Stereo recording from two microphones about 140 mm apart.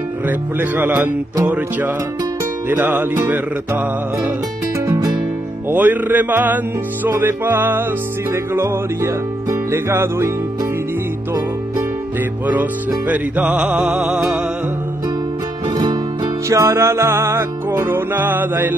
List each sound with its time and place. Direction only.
0.3 s music: 15° right (ahead or behind)
4.8 s music: 25° right (ahead or behind)
5.7 s music: 10° right (ahead or behind)
13.1 s music: 10° right (ahead or behind)
15.7 s music: 30° right (ahead or behind)